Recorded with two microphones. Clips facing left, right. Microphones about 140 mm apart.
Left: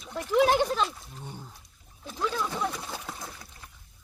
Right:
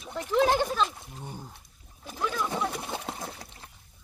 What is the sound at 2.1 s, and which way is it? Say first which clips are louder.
Speech: left 1 dB; 15° right (ahead or behind).